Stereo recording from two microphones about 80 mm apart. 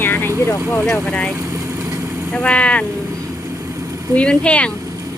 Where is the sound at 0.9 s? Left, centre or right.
Centre.